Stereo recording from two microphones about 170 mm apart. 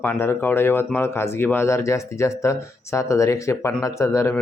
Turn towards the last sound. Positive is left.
turn(degrees=15)  # may be behind; listen again after turning